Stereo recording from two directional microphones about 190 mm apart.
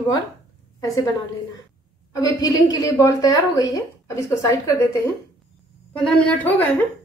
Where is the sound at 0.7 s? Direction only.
20° left (ahead or behind).